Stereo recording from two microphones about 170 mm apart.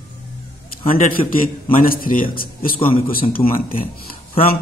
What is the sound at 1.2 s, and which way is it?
Speech, 35° left (ahead or behind).